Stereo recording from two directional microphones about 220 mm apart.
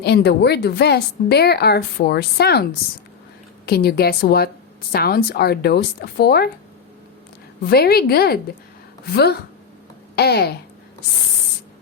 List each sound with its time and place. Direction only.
0.0 s a woman's voice: 50° left (ahead or behind)
3.7 s a woman's voice: 45° left (ahead or behind)
7.7 s a woman's voice: 45° left (ahead or behind)